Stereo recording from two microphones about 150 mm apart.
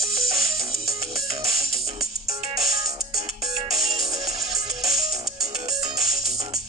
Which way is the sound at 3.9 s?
25° right (ahead or behind).